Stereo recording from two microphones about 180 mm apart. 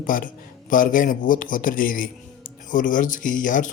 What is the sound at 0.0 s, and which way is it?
Speech, 50° left (ahead or behind).